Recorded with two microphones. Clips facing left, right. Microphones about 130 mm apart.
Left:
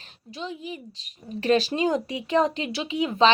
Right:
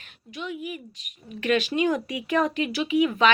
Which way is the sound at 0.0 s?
30° left (ahead or behind).